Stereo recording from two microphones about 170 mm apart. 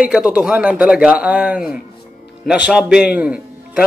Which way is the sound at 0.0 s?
5° right (ahead or behind).